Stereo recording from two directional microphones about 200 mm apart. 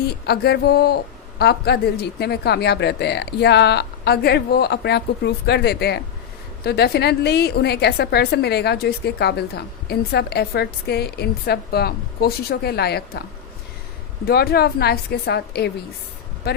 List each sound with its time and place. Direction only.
0.3 s a woman's voice: 55° left (ahead or behind)
14.3 s a woman's voice: 50° left (ahead or behind)